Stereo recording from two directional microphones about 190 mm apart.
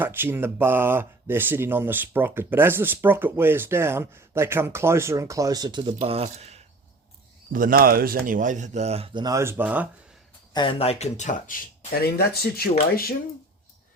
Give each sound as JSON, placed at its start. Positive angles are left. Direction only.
{"t": 0.0, "sound": "speech", "side_deg": -10}
{"t": 6.0, "sound": "speech", "side_deg": -35}
{"t": 7.5, "sound": "a man's voice", "side_deg": -45}
{"t": 9.2, "sound": "speech", "side_deg": -15}
{"t": 10.5, "sound": "speech", "side_deg": 25}